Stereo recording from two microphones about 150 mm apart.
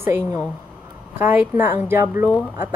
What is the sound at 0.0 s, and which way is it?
A woman's voice, 15° right (ahead or behind).